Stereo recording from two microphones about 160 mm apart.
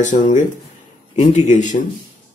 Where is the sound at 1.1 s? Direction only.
30° left (ahead or behind).